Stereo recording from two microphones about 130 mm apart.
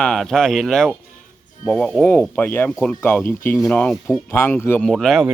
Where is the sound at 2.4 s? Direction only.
15° left (ahead or behind).